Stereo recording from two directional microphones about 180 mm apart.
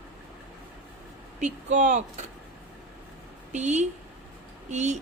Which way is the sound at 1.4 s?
40° right (ahead or behind).